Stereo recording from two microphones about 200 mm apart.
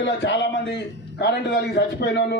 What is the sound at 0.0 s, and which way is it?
A man's voice, 60° left (ahead or behind).